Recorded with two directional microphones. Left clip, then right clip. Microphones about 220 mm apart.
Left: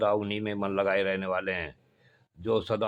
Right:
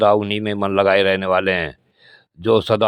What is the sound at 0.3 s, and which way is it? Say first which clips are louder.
A man's voice: right 10 dB; 35° right (ahead or behind).